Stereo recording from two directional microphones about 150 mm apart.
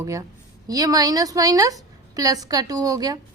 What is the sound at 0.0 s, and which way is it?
A woman's voice, 20° right (ahead or behind).